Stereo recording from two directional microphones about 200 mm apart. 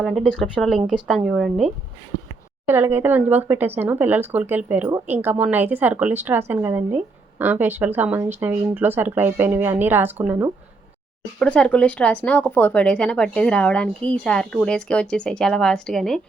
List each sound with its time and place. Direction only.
0.0 s speech: centre (ahead or behind)
2.6 s speech: 10° right (ahead or behind)
11.3 s speech: 5° left (ahead or behind)